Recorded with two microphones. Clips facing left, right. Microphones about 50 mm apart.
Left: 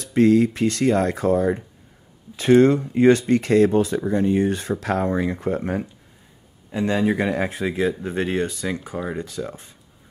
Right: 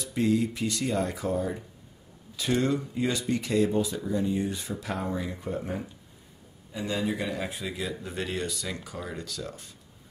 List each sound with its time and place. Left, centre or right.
0.0 s speech: left
2.3 s speech: left